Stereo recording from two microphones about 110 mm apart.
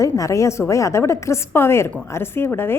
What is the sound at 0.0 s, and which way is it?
A woman's voice, 30° left (ahead or behind).